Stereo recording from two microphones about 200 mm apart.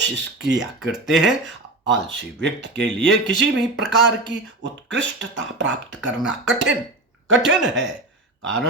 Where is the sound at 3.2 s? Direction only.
60° right (ahead or behind).